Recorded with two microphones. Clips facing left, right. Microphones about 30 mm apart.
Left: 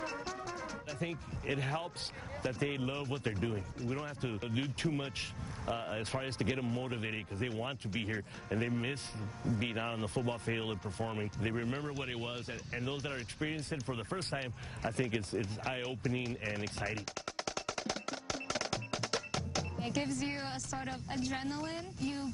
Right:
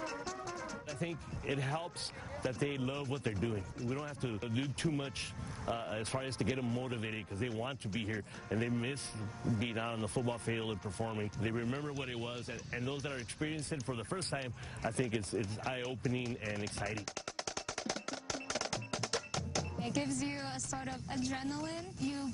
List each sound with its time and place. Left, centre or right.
0.0 s music: left
2.4 s speech: centre
9.6 s speech: centre
17.1 s percussion: centre
20.8 s speech: centre